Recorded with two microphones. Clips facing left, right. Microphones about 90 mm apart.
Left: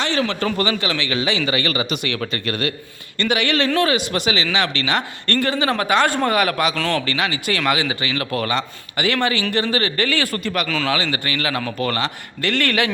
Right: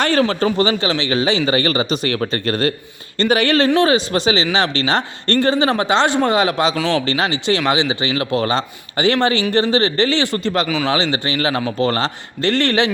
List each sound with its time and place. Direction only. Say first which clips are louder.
0.0 s speech: right 5 dB; 45° right (ahead or behind)
0.4 s speech: right 4 dB; 25° right (ahead or behind)
6.7 s a man's voice: right 3 dB; 15° right (ahead or behind)
7.1 s speech: right 4 dB; 30° right (ahead or behind)